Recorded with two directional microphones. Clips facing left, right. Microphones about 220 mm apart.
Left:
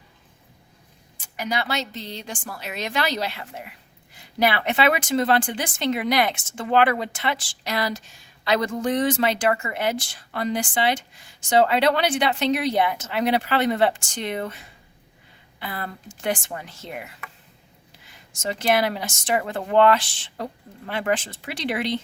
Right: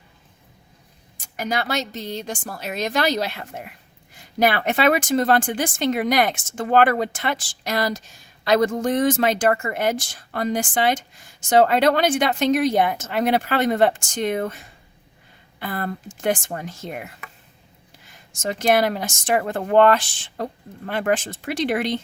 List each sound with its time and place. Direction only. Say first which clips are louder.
1.4 s a woman's voice: right 2 dB; 45° right (ahead or behind)
18.1 s a woman's voice: right 2 dB; 50° right (ahead or behind)